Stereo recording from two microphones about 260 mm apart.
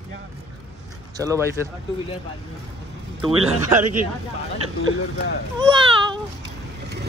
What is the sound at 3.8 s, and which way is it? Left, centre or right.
Speech, right.